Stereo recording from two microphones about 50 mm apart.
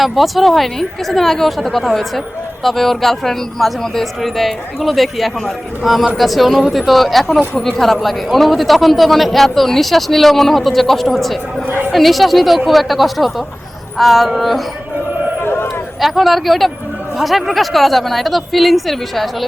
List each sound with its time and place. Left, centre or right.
0.0 s a man's voice: centre
15.4 s a sound: left
16.0 s a man's voice: centre